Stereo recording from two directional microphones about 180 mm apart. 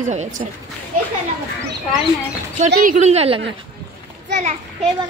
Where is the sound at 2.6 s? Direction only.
45° right (ahead or behind).